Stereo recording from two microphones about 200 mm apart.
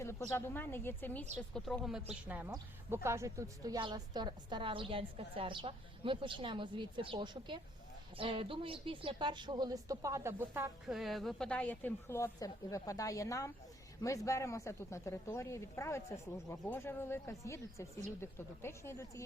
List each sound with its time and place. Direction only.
0.3 s a woman's voice: 10° left (ahead or behind); by 10.7 s 10° right (ahead or behind)
10.8 s speech: centre (ahead or behind)